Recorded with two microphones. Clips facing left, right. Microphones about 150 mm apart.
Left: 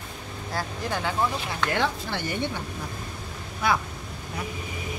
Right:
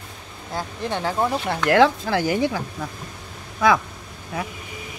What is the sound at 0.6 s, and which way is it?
Speech, 25° right (ahead or behind).